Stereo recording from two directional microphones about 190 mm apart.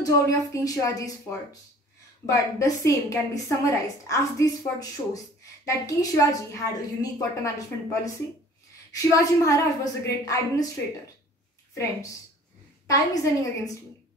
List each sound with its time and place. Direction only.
0.0 s a woman's voice: 20° left (ahead or behind)
2.2 s a woman's voice: 15° left (ahead or behind)
11.7 s a woman's voice: 15° left (ahead or behind)